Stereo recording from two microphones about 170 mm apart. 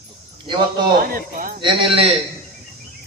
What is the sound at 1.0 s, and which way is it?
Speech, 55° right (ahead or behind).